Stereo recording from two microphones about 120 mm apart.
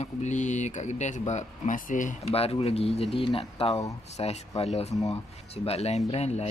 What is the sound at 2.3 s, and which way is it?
Speech, 55° left (ahead or behind).